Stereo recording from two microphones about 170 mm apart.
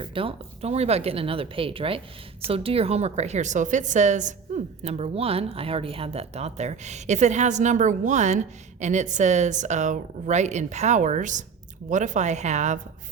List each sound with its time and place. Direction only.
0.0 s a woman's voice: 30° right (ahead or behind)